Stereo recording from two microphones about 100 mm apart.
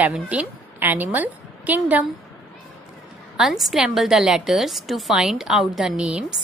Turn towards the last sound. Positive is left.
turn(degrees=-10)  # may be behind; listen again after turning